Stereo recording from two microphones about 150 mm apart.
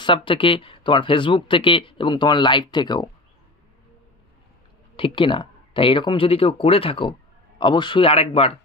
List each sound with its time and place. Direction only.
0.0 s speech: 35° left (ahead or behind)
4.9 s speech: 35° left (ahead or behind)